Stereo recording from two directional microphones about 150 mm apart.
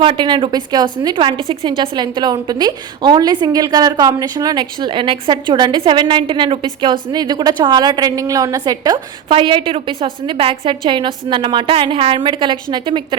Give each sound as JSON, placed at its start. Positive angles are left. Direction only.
{"t": 0.0, "sound": "a woman's voice", "side_deg": -35}